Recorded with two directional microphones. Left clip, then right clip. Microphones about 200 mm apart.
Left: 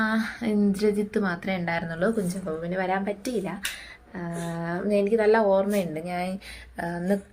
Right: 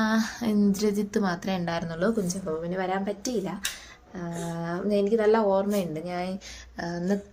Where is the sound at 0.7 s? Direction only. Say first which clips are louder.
Left 2 dB; 20° right (ahead or behind).